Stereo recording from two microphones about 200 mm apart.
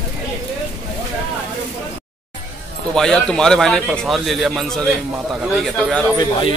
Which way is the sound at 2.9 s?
5° left (ahead or behind).